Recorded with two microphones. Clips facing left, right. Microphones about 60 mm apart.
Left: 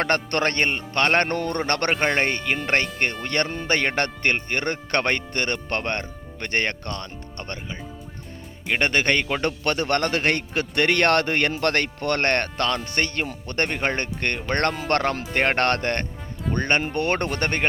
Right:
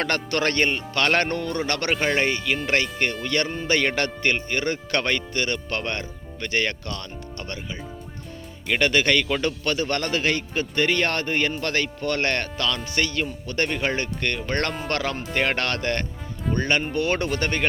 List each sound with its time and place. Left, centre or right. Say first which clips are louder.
0.3 s speech: even; left
1.3 s a man's voice: left 2 dB; left
8.9 s speech: right 1 dB; left
9.5 s a man's voice: left 2 dB; left
16.8 s a man's voice: even; left